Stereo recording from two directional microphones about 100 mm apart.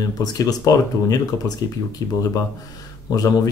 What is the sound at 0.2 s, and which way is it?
Speech, 40° left (ahead or behind).